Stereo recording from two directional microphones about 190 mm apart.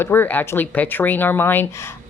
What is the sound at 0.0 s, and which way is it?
Speech, 10° left (ahead or behind).